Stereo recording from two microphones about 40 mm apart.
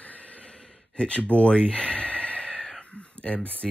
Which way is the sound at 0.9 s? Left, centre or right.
Left.